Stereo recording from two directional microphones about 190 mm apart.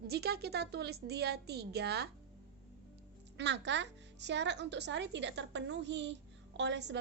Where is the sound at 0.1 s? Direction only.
55° right (ahead or behind).